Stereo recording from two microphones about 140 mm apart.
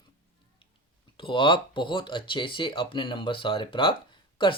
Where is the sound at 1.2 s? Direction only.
35° left (ahead or behind).